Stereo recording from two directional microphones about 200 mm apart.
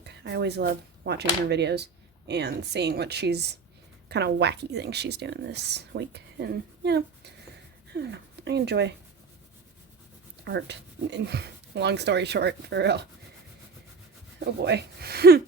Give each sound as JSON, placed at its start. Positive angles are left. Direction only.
{"t": 0.0, "sound": "a woman's voice", "side_deg": -55}
{"t": 10.4, "sound": "a woman's voice", "side_deg": -60}
{"t": 14.3, "sound": "speech", "side_deg": -55}